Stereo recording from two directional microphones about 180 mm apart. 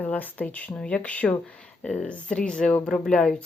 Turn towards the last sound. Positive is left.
turn(degrees=5)  # may be behind; listen again after turning